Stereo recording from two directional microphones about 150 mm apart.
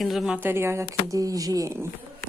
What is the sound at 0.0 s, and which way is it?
Speech, centre (ahead or behind).